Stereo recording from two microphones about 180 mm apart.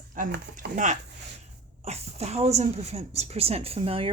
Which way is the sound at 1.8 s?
35° right (ahead or behind).